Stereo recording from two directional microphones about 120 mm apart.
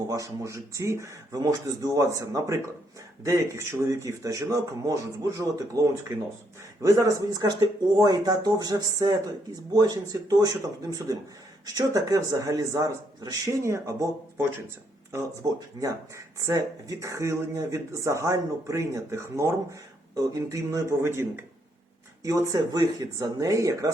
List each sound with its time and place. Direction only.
0.1 s speech: 25° right (ahead or behind)
11.6 s speech: 30° right (ahead or behind)
15.8 s speech: 25° right (ahead or behind)